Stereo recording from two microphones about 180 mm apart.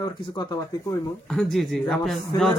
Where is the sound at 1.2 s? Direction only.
Centre (ahead or behind).